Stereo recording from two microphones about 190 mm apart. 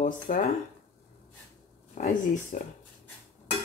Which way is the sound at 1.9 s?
40° left (ahead or behind).